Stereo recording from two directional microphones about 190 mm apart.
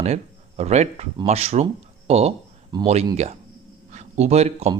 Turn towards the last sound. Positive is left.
turn(degrees=-35)  # may be behind; listen again after turning